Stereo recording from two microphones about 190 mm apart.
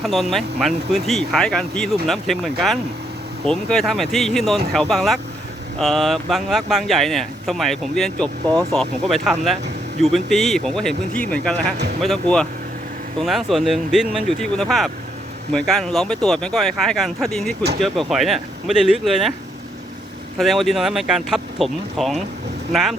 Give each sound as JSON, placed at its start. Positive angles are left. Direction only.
{"t": 0.0, "sound": "speech", "side_deg": 0}
{"t": 20.4, "sound": "speech", "side_deg": 0}